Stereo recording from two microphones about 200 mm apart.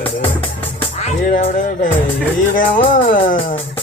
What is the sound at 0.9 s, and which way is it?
Speech, 35° left (ahead or behind).